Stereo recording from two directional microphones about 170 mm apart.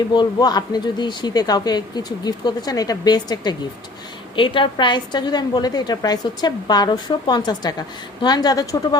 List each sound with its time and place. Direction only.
0.1 s a woman's voice: 25° left (ahead or behind)